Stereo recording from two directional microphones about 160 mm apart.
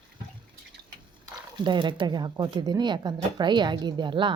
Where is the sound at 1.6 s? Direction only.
30° right (ahead or behind).